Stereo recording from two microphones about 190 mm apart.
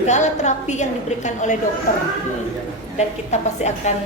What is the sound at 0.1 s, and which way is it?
Speech, 40° left (ahead or behind).